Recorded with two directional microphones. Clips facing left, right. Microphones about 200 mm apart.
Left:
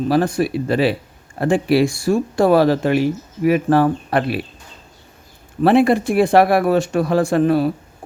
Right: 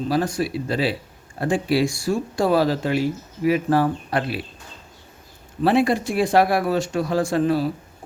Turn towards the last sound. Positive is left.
turn(degrees=55)  # may be behind; listen again after turning